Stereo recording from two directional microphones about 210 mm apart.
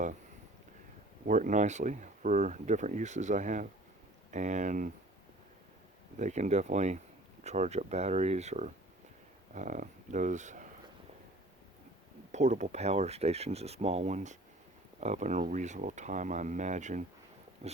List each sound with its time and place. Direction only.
1.3 s speech: 35° right (ahead or behind)
6.1 s speech: 35° right (ahead or behind)
12.3 s speech: 35° right (ahead or behind)
17.6 s dog: 30° right (ahead or behind)